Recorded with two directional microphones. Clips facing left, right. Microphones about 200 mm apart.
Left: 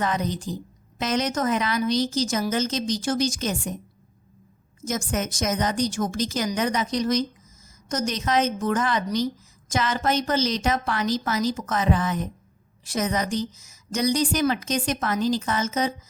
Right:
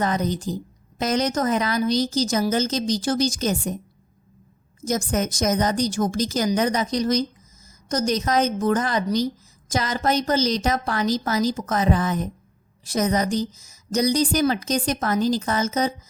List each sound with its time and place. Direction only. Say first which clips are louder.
0.0 s a woman's voice: right 3 dB; 40° right (ahead or behind)
4.9 s a woman's voice: right 4 dB; 40° right (ahead or behind)